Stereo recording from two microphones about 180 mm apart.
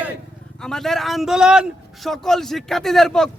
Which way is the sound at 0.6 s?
5° left (ahead or behind).